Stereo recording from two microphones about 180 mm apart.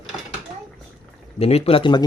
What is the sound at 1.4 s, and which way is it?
Speech, 30° left (ahead or behind).